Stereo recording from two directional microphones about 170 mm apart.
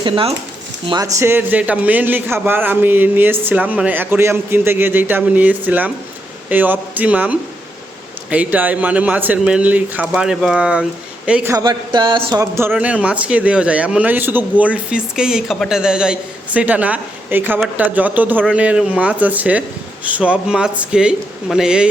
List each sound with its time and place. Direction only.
0.0 s speech: 30° right (ahead or behind)
0.9 s speech: 20° right (ahead or behind)
11.5 s speech: 25° right (ahead or behind); by 21.8 s 5° right (ahead or behind)